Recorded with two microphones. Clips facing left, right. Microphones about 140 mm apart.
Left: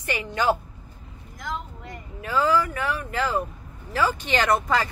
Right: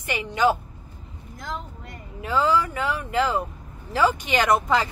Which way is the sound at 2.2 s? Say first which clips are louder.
Even; 20° right (ahead or behind).